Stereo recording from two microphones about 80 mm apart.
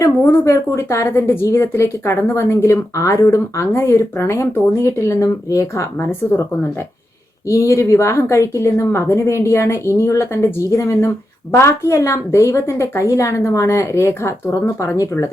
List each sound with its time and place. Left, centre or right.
0.0 s a woman's voice: left
6.0 s a woman's voice: left
7.4 s a woman's voice: left